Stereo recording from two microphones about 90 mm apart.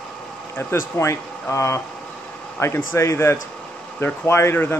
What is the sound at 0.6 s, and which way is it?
Speech, 25° left (ahead or behind).